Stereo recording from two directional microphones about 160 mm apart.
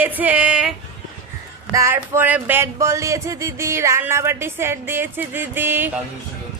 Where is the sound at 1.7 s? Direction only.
20° right (ahead or behind).